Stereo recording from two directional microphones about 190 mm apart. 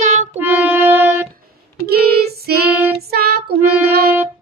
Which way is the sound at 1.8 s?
55° right (ahead or behind).